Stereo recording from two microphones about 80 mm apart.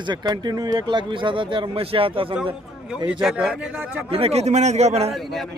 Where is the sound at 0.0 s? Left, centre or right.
Right.